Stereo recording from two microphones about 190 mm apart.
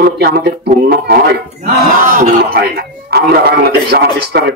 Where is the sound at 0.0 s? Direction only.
55° right (ahead or behind).